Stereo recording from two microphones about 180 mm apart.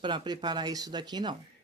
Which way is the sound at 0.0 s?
25° right (ahead or behind).